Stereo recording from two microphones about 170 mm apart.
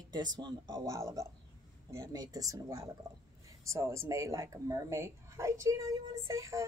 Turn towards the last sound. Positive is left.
turn(degrees=-15)  # may be behind; listen again after turning